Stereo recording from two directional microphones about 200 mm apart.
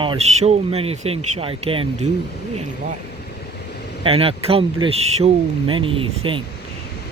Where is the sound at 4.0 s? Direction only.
30° right (ahead or behind).